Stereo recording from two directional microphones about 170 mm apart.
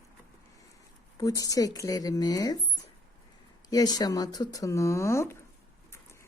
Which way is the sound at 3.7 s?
20° left (ahead or behind).